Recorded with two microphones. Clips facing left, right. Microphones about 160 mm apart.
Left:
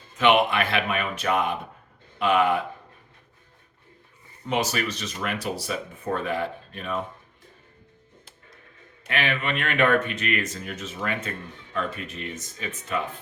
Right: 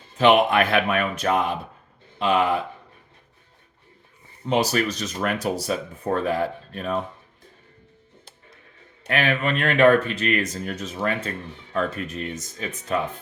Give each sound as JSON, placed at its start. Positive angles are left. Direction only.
{"t": 0.2, "sound": "speech", "side_deg": -35}
{"t": 0.5, "sound": "speech", "side_deg": -50}
{"t": 4.4, "sound": "speech", "side_deg": -35}
{"t": 9.0, "sound": "speech", "side_deg": -45}